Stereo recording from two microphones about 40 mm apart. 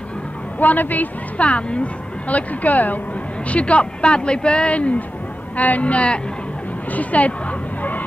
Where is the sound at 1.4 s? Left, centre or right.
Left.